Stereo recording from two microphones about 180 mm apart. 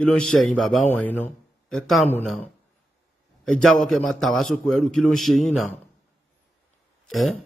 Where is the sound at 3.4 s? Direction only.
5° left (ahead or behind).